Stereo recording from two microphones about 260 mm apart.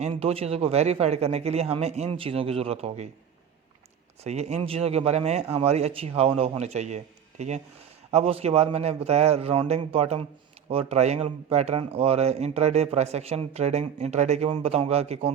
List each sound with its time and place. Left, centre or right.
0.0 s speech: right
4.2 s speech: right